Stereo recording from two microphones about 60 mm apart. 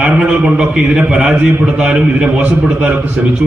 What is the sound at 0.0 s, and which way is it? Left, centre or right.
A man's voice, right.